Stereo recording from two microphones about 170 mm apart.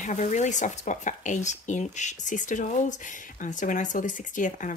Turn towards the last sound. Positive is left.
turn(degrees=50)  # may be behind; listen again after turning